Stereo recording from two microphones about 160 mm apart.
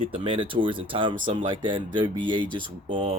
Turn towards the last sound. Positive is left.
turn(degrees=-30)  # may be behind; listen again after turning